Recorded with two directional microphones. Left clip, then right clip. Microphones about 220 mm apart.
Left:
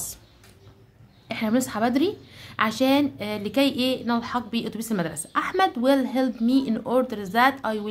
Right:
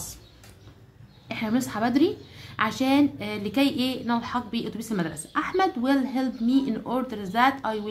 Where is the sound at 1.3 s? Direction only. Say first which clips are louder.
Left 3 dB; 20° left (ahead or behind).